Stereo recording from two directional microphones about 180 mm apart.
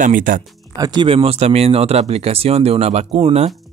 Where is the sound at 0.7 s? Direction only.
25° right (ahead or behind).